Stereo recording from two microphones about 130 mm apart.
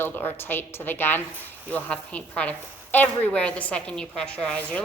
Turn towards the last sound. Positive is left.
turn(degrees=5)  # may be behind; listen again after turning